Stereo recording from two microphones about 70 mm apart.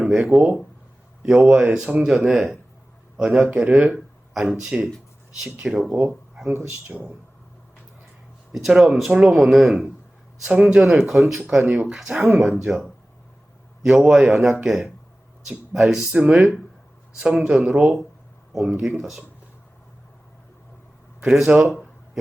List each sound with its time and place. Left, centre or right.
0.0 s speech: centre
1.5 s speech: right
2.0 s speech: centre
5.6 s speech: centre
6.0 s speech: centre
8.5 s speech: centre
10.4 s speech: centre
12.0 s speech: centre
12.4 s speech: centre
13.8 s speech: centre
21.2 s speech: centre
21.7 s a sound: centre